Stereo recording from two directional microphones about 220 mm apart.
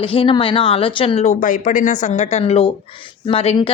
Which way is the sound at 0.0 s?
25° left (ahead or behind).